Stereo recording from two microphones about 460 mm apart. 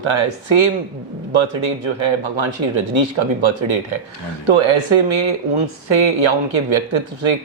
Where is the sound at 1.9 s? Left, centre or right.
Right.